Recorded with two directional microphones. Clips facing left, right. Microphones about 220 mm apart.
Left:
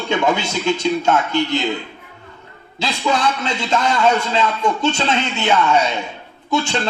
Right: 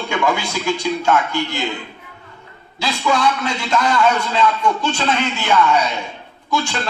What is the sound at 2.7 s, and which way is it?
A man's voice, 20° left (ahead or behind).